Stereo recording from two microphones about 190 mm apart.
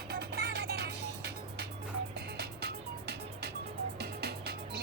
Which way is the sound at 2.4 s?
60° right (ahead or behind).